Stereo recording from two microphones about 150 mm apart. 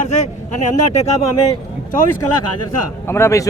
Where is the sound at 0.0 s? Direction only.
50° left (ahead or behind).